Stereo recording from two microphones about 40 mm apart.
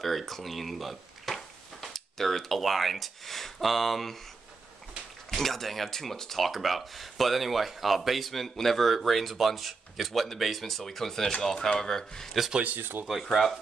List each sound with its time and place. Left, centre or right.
0.0 s speech: centre
5.3 s speech: centre
12.6 s speech: right
13.2 s speech: centre